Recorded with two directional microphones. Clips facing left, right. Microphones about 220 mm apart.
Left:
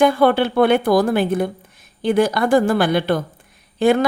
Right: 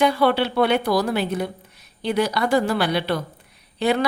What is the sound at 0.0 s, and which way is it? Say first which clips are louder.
A woman's voice: left 4 dB; 50° left (ahead or behind).